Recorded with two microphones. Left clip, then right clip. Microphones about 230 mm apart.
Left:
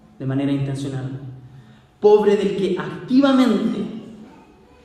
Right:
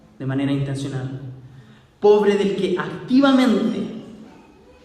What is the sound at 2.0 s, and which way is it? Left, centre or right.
Speech, right.